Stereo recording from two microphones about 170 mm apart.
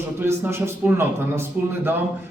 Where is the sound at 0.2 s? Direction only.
15° right (ahead or behind).